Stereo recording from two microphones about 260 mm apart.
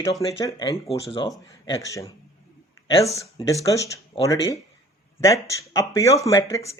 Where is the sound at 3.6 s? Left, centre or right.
Centre.